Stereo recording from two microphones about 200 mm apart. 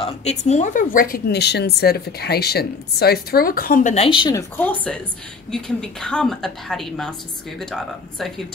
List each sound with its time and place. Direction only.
0.0 s a woman's voice: 35° left (ahead or behind); by 7.2 s centre (ahead or behind)